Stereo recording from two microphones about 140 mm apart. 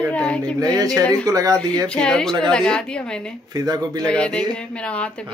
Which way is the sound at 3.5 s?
25° right (ahead or behind).